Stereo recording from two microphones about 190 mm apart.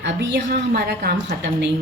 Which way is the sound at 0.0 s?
70° right (ahead or behind).